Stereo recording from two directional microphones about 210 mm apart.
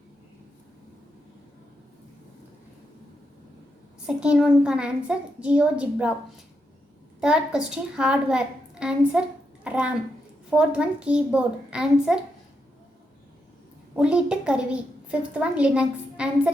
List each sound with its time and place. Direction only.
4.0 s a child's voice: 5° right (ahead or behind)
13.9 s a child's voice: 5° right (ahead or behind)